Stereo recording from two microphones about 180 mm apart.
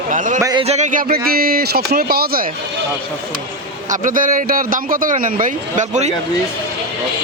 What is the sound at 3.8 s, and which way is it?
A man's voice, 45° right (ahead or behind).